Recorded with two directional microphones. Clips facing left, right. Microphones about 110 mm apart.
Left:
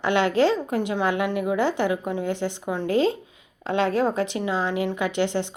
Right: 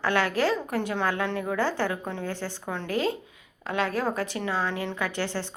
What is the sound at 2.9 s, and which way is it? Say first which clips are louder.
A woman's voice: left 6 dB; 25° left (ahead or behind).